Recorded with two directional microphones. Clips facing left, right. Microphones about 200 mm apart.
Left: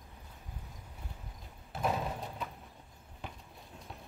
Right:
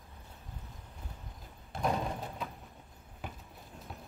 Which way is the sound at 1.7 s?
5° left (ahead or behind).